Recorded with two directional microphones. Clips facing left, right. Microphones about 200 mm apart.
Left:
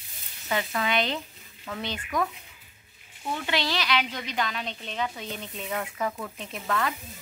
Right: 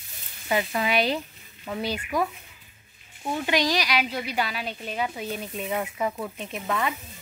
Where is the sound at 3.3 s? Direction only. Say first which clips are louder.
Right 5 dB; 15° right (ahead or behind).